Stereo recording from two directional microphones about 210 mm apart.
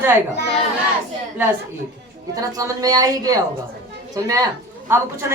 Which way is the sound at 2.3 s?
15° right (ahead or behind).